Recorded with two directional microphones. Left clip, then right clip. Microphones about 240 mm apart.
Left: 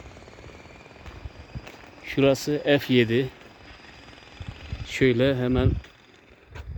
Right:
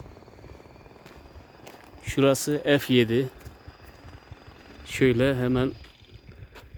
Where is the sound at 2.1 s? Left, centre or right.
Centre.